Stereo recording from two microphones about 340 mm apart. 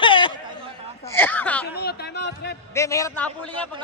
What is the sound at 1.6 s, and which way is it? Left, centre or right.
Speech, left.